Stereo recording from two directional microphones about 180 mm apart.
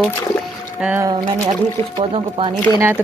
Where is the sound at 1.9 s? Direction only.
30° right (ahead or behind).